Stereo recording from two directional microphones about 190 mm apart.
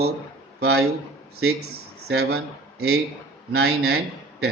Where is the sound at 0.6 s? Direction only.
60° right (ahead or behind).